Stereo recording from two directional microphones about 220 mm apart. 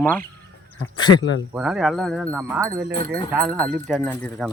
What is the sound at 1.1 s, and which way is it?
Speech, 80° left.